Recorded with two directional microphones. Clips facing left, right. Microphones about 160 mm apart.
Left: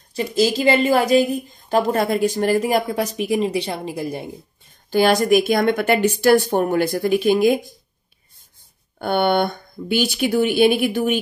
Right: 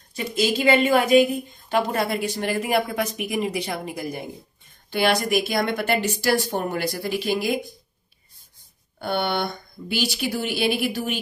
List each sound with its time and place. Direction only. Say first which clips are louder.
0.1 s speech: left 5 dB; 35° left (ahead or behind)
1.7 s speech: left 5 dB; 45° left (ahead or behind); by 4.3 s 25° left (ahead or behind)
4.9 s speech: left 6 dB; 45° left (ahead or behind)
8.9 s speech: left 7 dB; 55° left (ahead or behind)